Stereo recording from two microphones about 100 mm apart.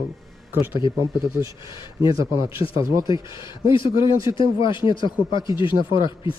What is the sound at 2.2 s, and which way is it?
Speech, 30° right (ahead or behind).